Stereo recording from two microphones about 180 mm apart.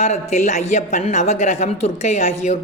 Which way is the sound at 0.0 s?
40° left (ahead or behind).